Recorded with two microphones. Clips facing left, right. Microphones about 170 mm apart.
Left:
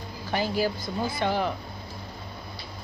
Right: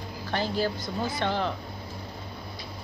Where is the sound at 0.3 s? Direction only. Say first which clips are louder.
Left 2 dB; 10° left (ahead or behind).